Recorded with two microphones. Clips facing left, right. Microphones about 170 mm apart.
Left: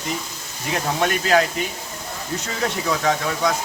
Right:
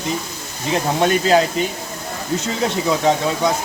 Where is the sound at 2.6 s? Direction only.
25° right (ahead or behind).